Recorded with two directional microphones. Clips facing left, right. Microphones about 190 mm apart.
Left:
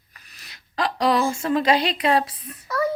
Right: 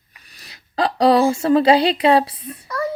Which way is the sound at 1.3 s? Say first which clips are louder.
Right 6 dB; 35° right (ahead or behind).